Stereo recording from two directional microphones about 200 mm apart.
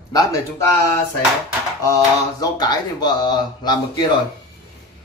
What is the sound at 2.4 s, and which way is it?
Speech, 20° left (ahead or behind).